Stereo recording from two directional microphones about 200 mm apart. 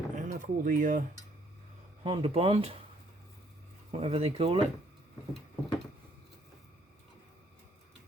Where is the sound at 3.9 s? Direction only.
30° right (ahead or behind).